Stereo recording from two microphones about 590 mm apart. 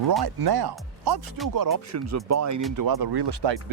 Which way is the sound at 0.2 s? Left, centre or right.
Right.